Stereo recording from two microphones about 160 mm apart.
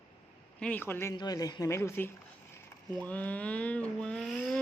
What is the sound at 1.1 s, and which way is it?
Speech, 25° left (ahead or behind).